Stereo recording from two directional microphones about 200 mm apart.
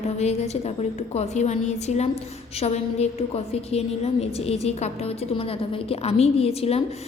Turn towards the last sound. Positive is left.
turn(degrees=30)  # may be behind; listen again after turning